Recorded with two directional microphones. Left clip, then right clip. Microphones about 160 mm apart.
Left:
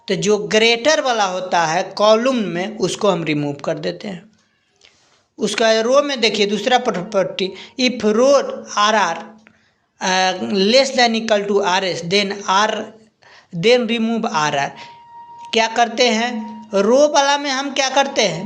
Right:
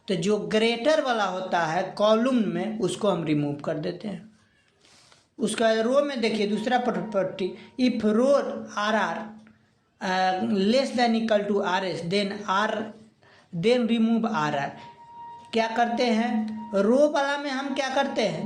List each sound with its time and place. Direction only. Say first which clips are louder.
0.0 s speech: left 8 dB; 15° left (ahead or behind)
5.4 s speech: left 8 dB; 25° left (ahead or behind)